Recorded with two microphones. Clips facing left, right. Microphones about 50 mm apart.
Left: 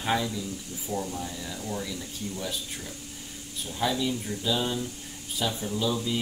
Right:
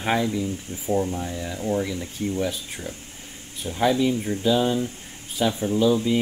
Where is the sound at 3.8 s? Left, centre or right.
Right.